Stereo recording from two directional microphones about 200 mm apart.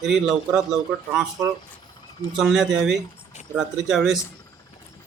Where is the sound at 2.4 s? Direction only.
5° right (ahead or behind).